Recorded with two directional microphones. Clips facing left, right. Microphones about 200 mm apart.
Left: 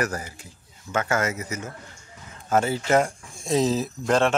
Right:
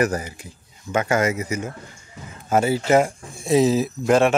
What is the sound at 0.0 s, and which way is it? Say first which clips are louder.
Speech: right 6 dB; 20° right (ahead or behind).